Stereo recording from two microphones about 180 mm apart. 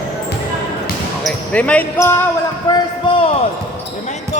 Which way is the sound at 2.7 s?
20° left (ahead or behind).